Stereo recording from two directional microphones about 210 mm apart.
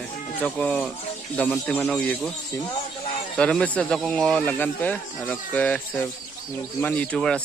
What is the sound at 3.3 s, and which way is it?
Speech, 5° left (ahead or behind).